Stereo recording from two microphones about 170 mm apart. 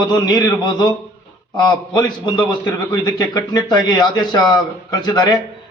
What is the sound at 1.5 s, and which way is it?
A man's voice, 25° left (ahead or behind).